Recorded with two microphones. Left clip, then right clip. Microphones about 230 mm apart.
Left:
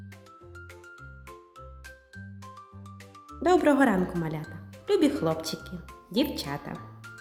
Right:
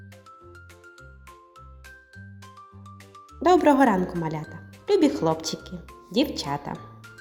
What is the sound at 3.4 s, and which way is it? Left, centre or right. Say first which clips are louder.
Speech: right 4 dB; centre.